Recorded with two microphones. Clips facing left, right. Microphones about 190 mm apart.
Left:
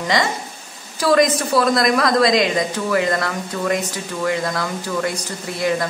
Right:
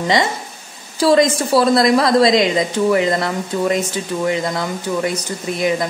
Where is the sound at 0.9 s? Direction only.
25° right (ahead or behind).